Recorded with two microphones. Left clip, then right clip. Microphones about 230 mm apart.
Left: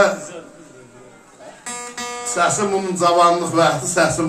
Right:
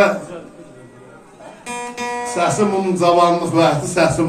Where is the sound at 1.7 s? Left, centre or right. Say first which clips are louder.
Right 4 dB; left.